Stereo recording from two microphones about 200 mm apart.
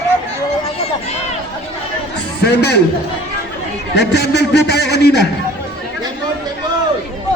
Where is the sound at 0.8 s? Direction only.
30° left (ahead or behind).